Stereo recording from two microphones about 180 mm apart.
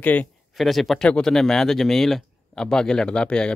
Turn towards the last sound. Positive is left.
turn(degrees=5)  # may be behind; listen again after turning